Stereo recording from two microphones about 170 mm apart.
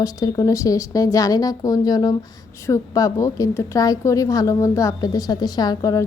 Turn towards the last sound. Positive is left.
turn(degrees=20)  # may be behind; listen again after turning